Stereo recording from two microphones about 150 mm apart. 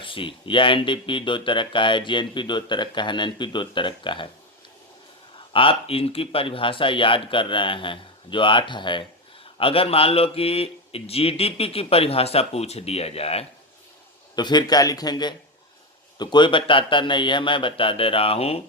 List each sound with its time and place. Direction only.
0.0 s speech: 35° left (ahead or behind)
5.5 s speech: 40° left (ahead or behind)
14.3 s a man's voice: 30° left (ahead or behind)